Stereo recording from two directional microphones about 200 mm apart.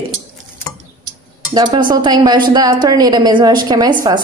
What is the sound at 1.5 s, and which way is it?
A woman's voice, 20° right (ahead or behind).